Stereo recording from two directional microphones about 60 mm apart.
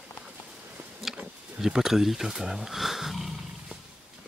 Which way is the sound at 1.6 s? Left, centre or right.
Centre.